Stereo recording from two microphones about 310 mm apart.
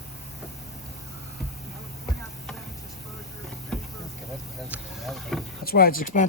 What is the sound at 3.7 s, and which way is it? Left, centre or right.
Vehicle, centre.